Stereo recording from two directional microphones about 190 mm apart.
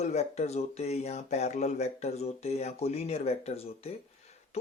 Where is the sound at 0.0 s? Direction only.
35° left (ahead or behind).